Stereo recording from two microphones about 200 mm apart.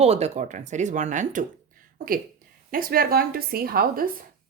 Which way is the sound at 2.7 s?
45° right (ahead or behind).